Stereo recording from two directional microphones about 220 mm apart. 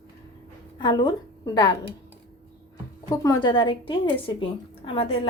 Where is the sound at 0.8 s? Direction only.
20° left (ahead or behind).